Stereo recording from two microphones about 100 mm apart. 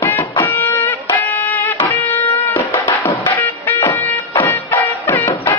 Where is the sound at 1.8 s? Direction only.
20° left (ahead or behind).